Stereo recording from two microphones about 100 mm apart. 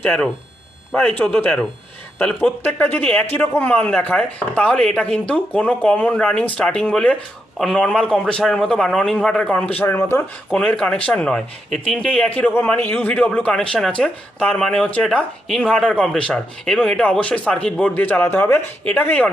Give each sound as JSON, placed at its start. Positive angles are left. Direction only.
{"t": 0.0, "sound": "speech", "side_deg": 15}
{"t": 10.6, "sound": "speech", "side_deg": 10}